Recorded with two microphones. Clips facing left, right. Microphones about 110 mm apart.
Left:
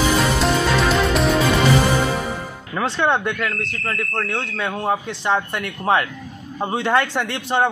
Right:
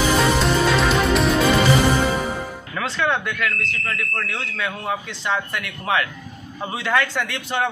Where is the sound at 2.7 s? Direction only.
25° left (ahead or behind).